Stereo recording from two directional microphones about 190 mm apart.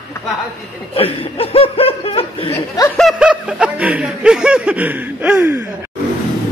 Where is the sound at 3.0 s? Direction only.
Centre (ahead or behind).